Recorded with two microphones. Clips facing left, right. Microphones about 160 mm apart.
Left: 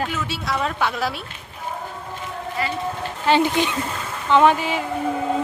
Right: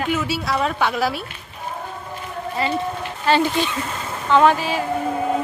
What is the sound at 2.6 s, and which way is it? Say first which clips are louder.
Speech: right 3 dB; 25° right (ahead or behind).